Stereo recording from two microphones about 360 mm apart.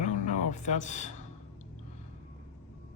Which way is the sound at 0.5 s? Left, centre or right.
Centre.